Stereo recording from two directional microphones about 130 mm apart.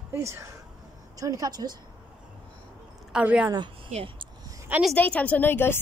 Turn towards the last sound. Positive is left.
turn(degrees=15)  # may be behind; listen again after turning